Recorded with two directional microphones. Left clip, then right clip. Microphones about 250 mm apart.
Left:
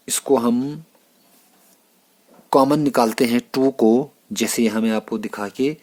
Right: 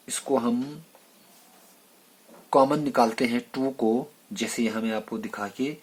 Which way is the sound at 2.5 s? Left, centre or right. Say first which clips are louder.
Left 5 dB; left.